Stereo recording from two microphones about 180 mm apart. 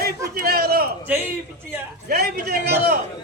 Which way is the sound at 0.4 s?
60° right (ahead or behind).